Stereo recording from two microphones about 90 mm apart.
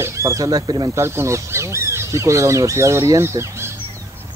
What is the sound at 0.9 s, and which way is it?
Speech, 30° right (ahead or behind).